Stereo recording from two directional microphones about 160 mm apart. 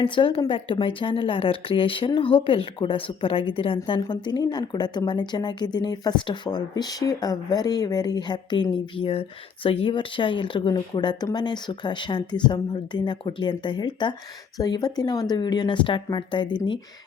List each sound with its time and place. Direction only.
0.0 s a woman's voice: 30° left (ahead or behind)